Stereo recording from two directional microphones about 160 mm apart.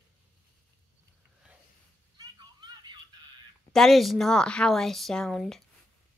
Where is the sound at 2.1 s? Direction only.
25° right (ahead or behind).